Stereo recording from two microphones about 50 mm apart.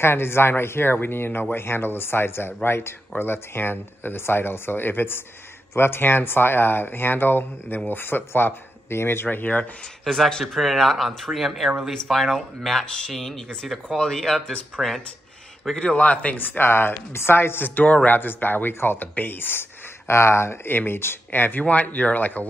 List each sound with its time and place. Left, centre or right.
0.0 s speech: left
10.0 s speech: centre
14.8 s speech: centre
15.8 s speech: left
16.3 s speech: left
20.1 s speech: left
20.7 s speech: left